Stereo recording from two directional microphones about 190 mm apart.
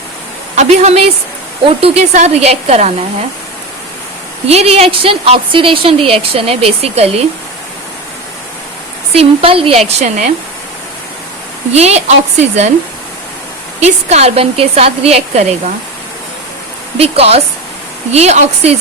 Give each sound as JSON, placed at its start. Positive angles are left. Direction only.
{"t": 0.5, "sound": "a woman's voice", "side_deg": -35}
{"t": 4.4, "sound": "a woman's voice", "side_deg": -30}
{"t": 9.1, "sound": "a woman's voice", "side_deg": -30}
{"t": 11.7, "sound": "a woman's voice", "side_deg": -35}
{"t": 13.7, "sound": "a woman's voice", "side_deg": -35}
{"t": 17.0, "sound": "a woman's voice", "side_deg": -30}